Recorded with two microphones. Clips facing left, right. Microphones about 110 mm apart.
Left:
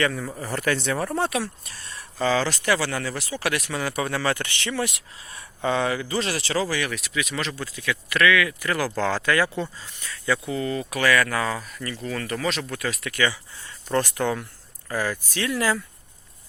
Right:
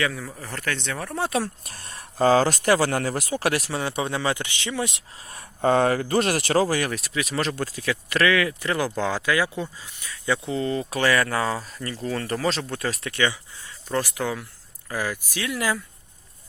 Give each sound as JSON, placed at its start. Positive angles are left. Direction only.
{"t": 0.0, "sound": "speech", "side_deg": 0}
{"t": 1.3, "sound": "speech", "side_deg": -45}
{"t": 5.3, "sound": "speech", "side_deg": -45}
{"t": 13.8, "sound": "speech", "side_deg": -5}